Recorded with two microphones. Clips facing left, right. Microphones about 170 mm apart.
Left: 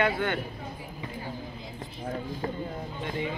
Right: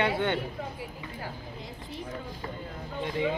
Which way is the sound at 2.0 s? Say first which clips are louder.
Left 7 dB; 50° left (ahead or behind).